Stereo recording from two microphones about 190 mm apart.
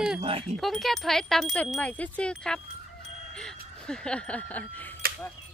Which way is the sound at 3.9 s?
5° left (ahead or behind).